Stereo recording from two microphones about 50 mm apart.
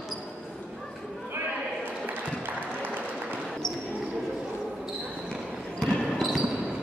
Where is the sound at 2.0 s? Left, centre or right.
Right.